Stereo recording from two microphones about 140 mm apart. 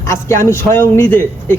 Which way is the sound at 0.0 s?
20° left (ahead or behind).